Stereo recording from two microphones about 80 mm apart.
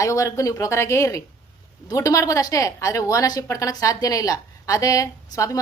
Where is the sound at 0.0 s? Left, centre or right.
Left.